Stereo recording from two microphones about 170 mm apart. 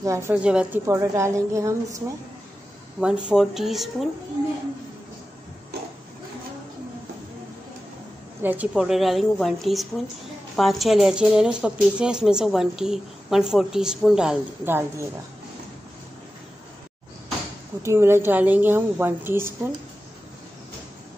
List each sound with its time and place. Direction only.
0.0 s a woman's voice: 15° right (ahead or behind)
0.8 s a woman's voice: 15° right (ahead or behind)
3.0 s speech: 5° right (ahead or behind)
8.4 s speech: 10° right (ahead or behind)
17.8 s a woman's voice: 15° right (ahead or behind)